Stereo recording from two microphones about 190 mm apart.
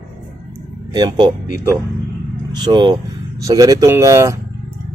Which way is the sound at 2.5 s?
25° right (ahead or behind).